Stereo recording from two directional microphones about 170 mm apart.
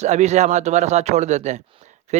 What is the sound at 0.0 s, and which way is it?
A man's voice, 40° right (ahead or behind).